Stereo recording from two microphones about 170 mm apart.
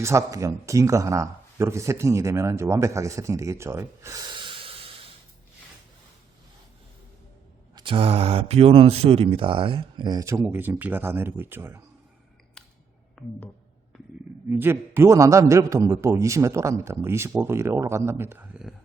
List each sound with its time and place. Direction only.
0.0 s speech: 15° right (ahead or behind); by 4.9 s 35° right (ahead or behind)
7.8 s speech: 30° right (ahead or behind); by 11.8 s 15° right (ahead or behind)
12.6 s music: 5° left (ahead or behind)
13.2 s a sound: 5° left (ahead or behind)
14.5 s speech: 15° right (ahead or behind)